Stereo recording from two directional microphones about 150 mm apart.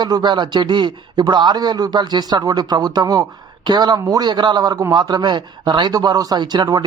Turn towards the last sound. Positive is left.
turn(degrees=-25)  # may be behind; listen again after turning